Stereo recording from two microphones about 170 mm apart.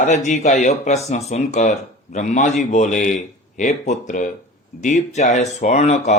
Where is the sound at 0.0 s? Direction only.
45° left (ahead or behind).